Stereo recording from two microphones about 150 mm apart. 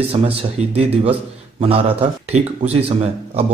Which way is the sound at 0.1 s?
40° right (ahead or behind).